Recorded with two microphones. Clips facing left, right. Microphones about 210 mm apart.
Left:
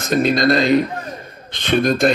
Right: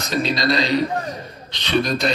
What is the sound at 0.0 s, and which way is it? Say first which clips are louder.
Speech: left 6 dB; 50° left (ahead or behind).